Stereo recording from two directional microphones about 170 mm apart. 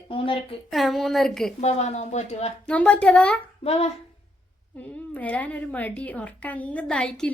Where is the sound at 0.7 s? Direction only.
Centre (ahead or behind).